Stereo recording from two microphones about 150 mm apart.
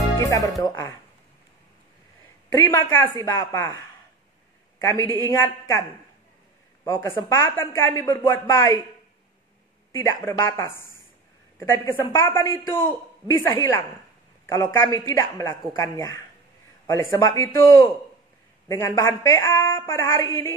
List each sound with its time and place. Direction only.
0.2 s a woman's voice: 20° left (ahead or behind)
2.9 s a woman's voice: 15° left (ahead or behind)
4.9 s a woman's voice: 25° right (ahead or behind)
5.3 s a woman's voice: 20° left (ahead or behind)
9.9 s a woman's voice: 20° left (ahead or behind)